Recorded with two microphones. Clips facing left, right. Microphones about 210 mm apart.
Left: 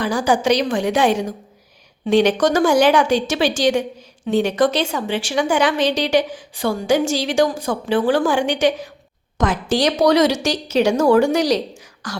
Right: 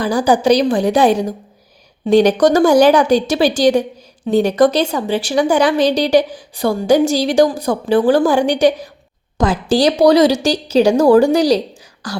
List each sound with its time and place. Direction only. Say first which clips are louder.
0.0 s a woman's voice: right 4 dB; 35° right (ahead or behind)